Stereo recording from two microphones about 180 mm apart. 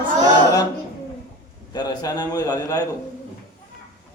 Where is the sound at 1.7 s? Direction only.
20° left (ahead or behind).